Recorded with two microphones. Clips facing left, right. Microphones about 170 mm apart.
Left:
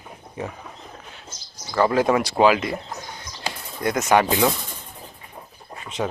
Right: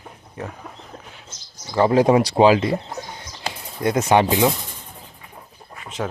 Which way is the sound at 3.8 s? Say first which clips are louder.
Right 2 dB; 30° right (ahead or behind).